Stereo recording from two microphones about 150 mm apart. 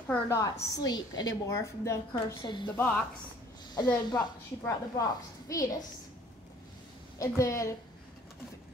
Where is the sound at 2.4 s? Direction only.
30° left (ahead or behind).